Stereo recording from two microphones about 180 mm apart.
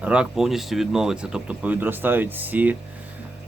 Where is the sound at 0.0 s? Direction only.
5° right (ahead or behind).